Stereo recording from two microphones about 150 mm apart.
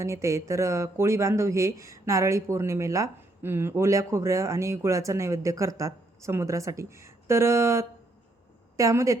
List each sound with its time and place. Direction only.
0.0 s speech: 20° right (ahead or behind)